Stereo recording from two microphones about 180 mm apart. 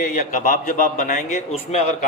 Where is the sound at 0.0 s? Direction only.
45° left (ahead or behind).